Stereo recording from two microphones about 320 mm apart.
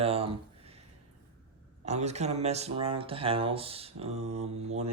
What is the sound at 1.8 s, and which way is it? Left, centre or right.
Speech, right.